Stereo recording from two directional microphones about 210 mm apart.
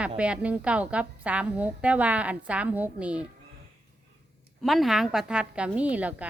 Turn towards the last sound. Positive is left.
turn(degrees=-5)  # may be behind; listen again after turning